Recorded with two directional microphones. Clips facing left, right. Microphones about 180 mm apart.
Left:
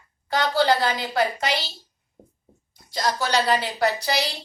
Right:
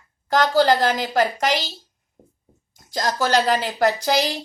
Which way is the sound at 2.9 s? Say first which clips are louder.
Right 3 dB; 45° right (ahead or behind).